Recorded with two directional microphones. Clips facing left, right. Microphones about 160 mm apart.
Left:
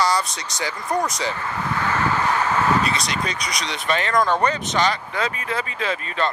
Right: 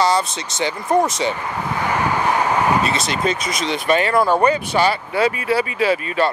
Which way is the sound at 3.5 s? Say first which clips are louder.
Right 4 dB; 5° right (ahead or behind).